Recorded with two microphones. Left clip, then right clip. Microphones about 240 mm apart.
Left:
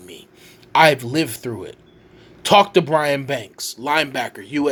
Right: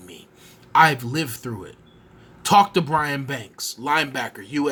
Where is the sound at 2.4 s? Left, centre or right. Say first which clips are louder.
Left 3 dB; right.